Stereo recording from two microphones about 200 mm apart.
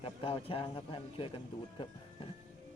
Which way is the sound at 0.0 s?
25° left (ahead or behind).